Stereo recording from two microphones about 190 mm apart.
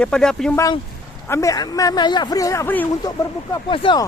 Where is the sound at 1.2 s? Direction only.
15° left (ahead or behind).